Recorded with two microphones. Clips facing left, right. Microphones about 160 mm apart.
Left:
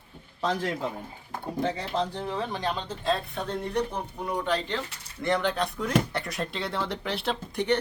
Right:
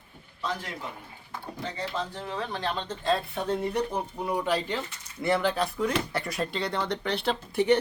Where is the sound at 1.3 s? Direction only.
50° left (ahead or behind).